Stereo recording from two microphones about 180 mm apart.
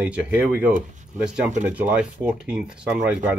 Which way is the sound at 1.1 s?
45° right (ahead or behind).